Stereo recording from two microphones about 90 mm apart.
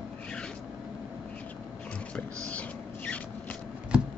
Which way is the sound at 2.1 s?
15° left (ahead or behind).